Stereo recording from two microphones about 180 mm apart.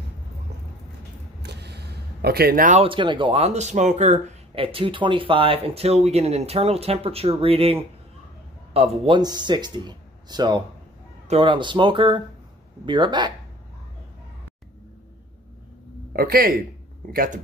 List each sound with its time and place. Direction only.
1.4 s a sound: 65° right (ahead or behind); by 2.8 s 50° right (ahead or behind)
2.8 s speech: 30° right (ahead or behind)
16.1 s speech: 55° right (ahead or behind)